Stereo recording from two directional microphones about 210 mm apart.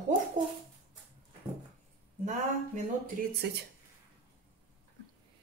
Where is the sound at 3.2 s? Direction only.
45° right (ahead or behind).